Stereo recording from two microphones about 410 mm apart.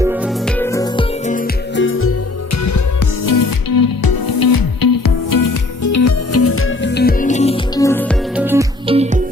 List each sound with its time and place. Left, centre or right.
0.0 s music: centre; by 2.1 s left
3.2 s music: left; by 9.2 s centre